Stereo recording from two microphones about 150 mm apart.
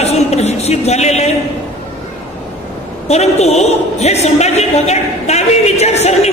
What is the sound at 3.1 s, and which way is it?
A man's voice, 45° left (ahead or behind).